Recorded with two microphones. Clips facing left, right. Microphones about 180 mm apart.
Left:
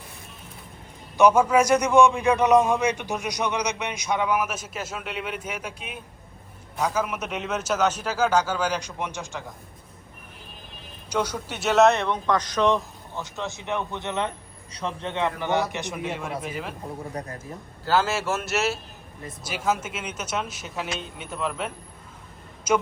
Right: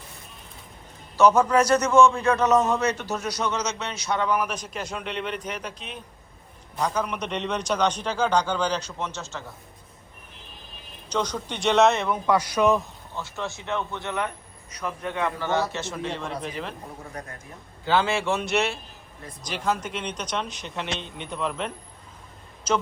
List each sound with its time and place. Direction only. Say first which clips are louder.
1.1 s a man's voice: left 1 dB; 10° left (ahead or behind)
11.1 s a man's voice: left 1 dB; 10° left (ahead or behind); by 12.8 s 10° right (ahead or behind)
13.1 s a man's voice: even; 15° left (ahead or behind)
17.8 s a man's voice: even; 5° left (ahead or behind)